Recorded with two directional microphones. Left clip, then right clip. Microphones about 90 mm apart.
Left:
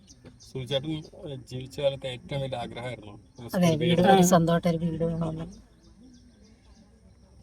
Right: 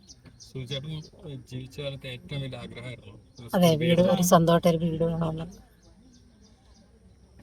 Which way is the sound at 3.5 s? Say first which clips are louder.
Right 3 dB; 20° right (ahead or behind).